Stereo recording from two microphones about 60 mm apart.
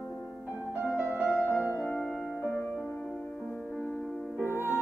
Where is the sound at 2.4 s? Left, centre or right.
Left.